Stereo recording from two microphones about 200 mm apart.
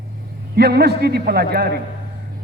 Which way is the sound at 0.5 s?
55° right (ahead or behind).